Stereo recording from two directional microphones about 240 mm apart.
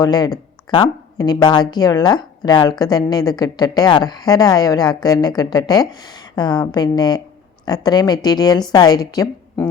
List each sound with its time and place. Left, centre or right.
0.0 s speech: centre